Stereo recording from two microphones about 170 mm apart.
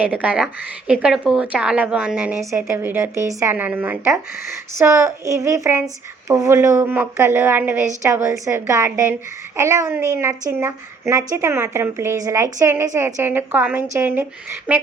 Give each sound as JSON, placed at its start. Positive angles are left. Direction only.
{"t": 0.0, "sound": "a woman's voice", "side_deg": -10}